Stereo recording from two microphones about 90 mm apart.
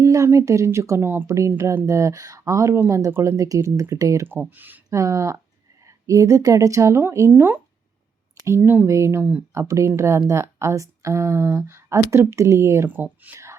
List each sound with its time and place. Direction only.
0.0 s speech: 35° right (ahead or behind)
4.3 s speech: 20° right (ahead or behind)
4.9 s speech: 35° right (ahead or behind)
13.2 s a sound: 30° right (ahead or behind)